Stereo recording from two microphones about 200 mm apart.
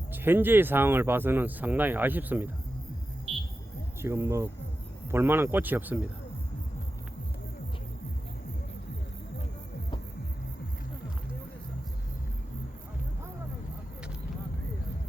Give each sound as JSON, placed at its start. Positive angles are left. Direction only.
{"t": 0.1, "sound": "speech", "side_deg": -10}
{"t": 4.0, "sound": "speech", "side_deg": -15}